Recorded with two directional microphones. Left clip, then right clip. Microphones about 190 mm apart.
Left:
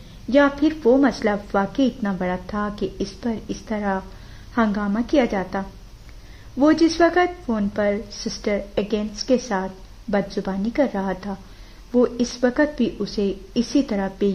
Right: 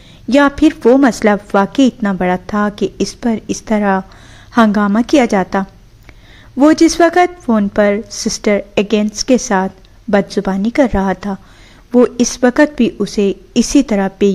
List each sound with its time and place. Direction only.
0.3 s a woman's voice: 30° right (ahead or behind)